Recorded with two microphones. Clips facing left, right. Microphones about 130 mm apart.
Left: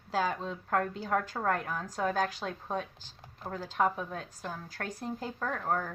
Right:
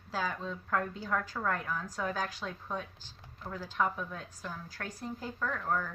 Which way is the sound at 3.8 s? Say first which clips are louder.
Left 3 dB; 50° left (ahead or behind).